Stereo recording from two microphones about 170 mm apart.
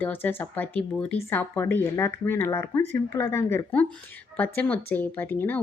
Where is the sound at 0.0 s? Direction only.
10° left (ahead or behind).